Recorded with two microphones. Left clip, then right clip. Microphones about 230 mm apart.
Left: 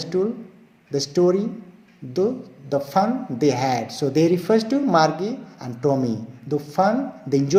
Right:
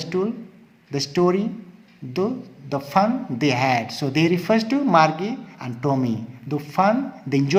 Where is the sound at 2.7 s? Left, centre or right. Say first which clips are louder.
Even; right.